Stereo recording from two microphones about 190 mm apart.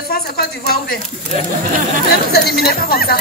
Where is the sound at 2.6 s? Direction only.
55° left (ahead or behind).